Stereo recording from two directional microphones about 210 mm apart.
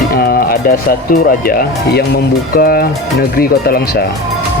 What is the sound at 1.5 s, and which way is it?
Speech, 50° left (ahead or behind).